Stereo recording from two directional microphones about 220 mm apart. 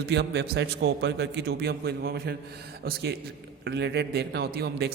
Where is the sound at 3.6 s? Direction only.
50° right (ahead or behind).